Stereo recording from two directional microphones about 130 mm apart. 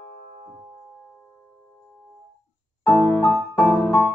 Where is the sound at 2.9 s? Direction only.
Centre (ahead or behind).